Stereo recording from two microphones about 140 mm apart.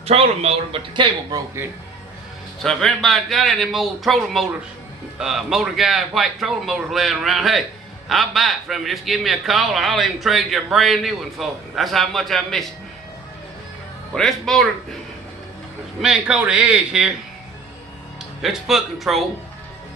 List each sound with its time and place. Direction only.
0.0 s speech: 45° right (ahead or behind)
2.6 s a man's voice: centre (ahead or behind)
14.1 s a man's voice: centre (ahead or behind)
16.0 s a man's voice: 5° right (ahead or behind)
18.4 s a man's voice: centre (ahead or behind)